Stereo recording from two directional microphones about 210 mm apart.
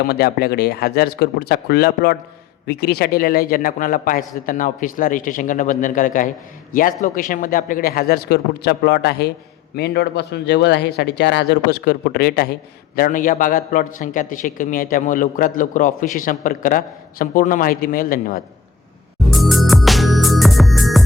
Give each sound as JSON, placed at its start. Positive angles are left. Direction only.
{"t": 0.1, "sound": "a man's voice", "side_deg": 50}
{"t": 19.3, "sound": "music", "side_deg": 0}